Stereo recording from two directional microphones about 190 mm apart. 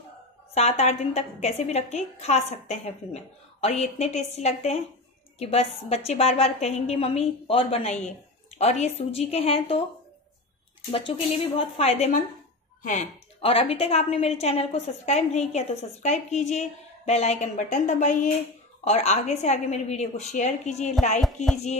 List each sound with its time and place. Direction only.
0.6 s a woman's voice: 35° left (ahead or behind)
10.9 s a woman's voice: 30° left (ahead or behind)